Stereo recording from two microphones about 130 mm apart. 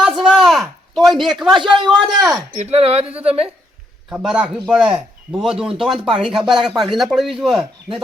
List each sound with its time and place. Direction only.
0.0 s a sound: 5° right (ahead or behind)
1.9 s speech: 5° right (ahead or behind)
2.7 s speech: 50° right (ahead or behind)
4.2 s speech: 5° right (ahead or behind)